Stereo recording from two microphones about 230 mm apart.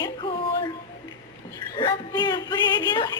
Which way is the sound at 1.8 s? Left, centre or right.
Centre.